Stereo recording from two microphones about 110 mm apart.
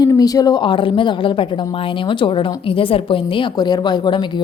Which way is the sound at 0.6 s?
50° left (ahead or behind).